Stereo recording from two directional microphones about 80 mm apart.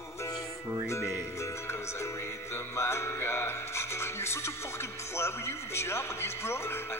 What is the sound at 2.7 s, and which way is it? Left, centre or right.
Music, left.